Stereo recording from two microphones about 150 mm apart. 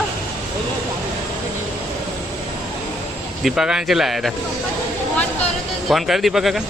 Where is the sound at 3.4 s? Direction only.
5° right (ahead or behind).